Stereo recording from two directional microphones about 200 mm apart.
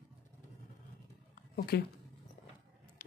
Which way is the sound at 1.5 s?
50° left (ahead or behind).